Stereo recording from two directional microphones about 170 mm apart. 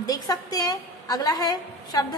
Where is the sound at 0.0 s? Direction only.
20° left (ahead or behind).